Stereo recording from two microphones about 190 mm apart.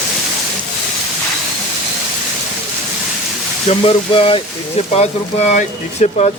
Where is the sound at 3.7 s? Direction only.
30° left (ahead or behind).